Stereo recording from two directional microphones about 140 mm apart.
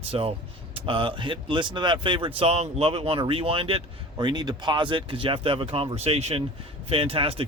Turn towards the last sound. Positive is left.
turn(degrees=-45)  # may be behind; listen again after turning